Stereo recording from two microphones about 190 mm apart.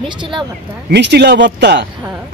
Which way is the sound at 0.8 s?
60° right (ahead or behind).